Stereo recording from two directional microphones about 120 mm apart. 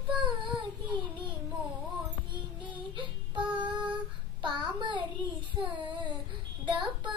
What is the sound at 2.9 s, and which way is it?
Child singing, 45° right (ahead or behind).